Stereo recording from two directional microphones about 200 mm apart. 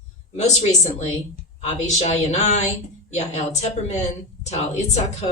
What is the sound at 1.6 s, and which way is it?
Speech, 35° left (ahead or behind).